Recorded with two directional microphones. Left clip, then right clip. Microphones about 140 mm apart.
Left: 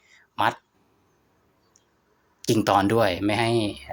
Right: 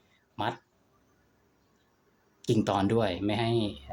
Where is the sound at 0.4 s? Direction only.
20° left (ahead or behind).